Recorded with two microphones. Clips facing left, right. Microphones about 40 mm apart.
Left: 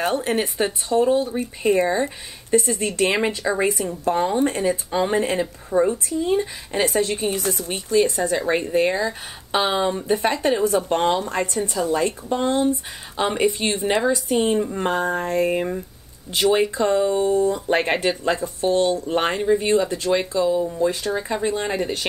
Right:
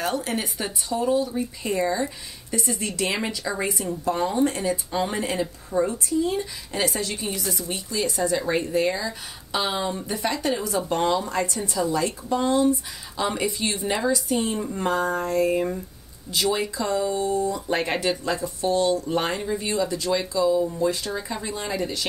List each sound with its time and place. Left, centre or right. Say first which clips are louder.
0.0 s a woman's voice: left 5 dB; left